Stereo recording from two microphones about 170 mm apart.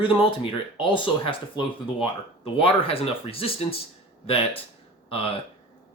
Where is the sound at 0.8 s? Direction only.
30° left (ahead or behind).